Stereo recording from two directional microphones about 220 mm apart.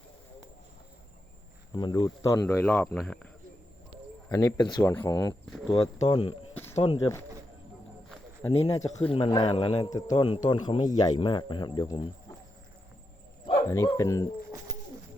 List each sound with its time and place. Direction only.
1.7 s speech: 20° left (ahead or behind); by 3.2 s 5° left (ahead or behind)
4.3 s a man's voice: 15° left (ahead or behind)
8.5 s a man's voice: 15° left (ahead or behind)
13.7 s speech: 15° left (ahead or behind)